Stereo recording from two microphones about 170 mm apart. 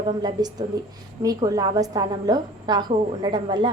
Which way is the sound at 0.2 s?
25° right (ahead or behind).